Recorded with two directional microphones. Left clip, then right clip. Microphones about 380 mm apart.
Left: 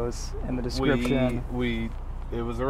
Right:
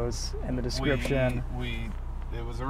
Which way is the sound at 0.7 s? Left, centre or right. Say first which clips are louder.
Left 4 dB; centre.